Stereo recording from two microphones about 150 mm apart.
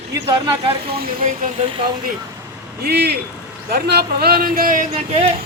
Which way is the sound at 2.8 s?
90° right.